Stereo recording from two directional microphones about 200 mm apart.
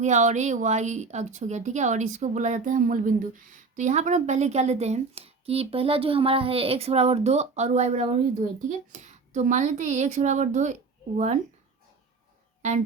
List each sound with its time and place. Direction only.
0.0 s speech: 35° right (ahead or behind)